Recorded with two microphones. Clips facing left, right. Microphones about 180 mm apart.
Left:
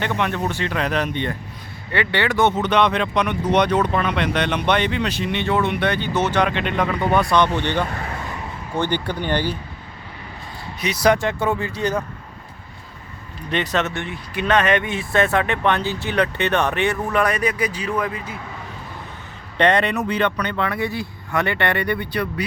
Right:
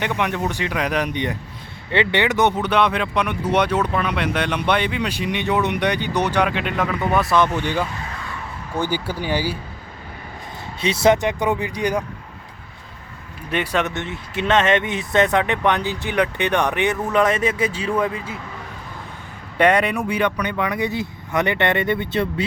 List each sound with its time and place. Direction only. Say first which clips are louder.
0.0 s speech: even; 15° right (ahead or behind)
10.8 s speech: right 2 dB; 25° right (ahead or behind)
13.5 s a man's voice: even; 10° right (ahead or behind); by 18.3 s 25° right (ahead or behind)
19.5 s speech: right 1 dB; 10° right (ahead or behind); by 22.4 s 25° right (ahead or behind)